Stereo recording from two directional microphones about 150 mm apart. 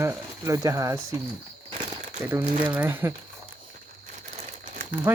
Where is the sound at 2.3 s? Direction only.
10° right (ahead or behind).